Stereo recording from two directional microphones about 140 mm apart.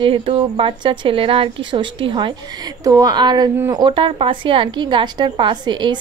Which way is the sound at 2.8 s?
25° right (ahead or behind).